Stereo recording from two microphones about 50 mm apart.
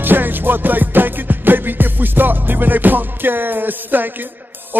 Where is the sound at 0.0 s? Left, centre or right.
Right.